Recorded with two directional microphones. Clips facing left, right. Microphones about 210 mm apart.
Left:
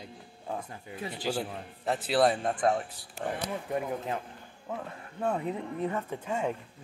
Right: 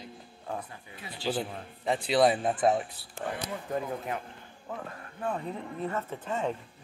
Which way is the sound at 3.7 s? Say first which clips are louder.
Even; 20° left (ahead or behind).